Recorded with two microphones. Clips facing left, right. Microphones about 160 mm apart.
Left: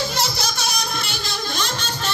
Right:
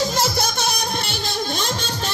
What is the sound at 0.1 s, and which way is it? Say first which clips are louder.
Music: right 3 dB; 50° right (ahead or behind).